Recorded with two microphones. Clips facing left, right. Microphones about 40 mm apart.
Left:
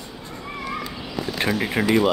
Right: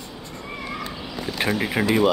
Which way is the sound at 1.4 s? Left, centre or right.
Centre.